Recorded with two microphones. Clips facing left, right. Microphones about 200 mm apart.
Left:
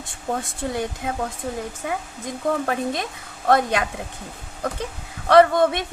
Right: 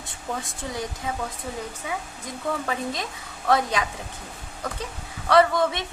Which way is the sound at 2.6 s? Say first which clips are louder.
Left 4 dB; 55° left (ahead or behind).